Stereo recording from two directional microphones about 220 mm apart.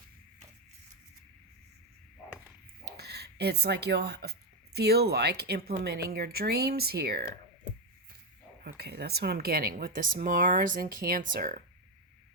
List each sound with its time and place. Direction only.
2.8 s speech: 45° right (ahead or behind)
8.6 s speech: 45° right (ahead or behind)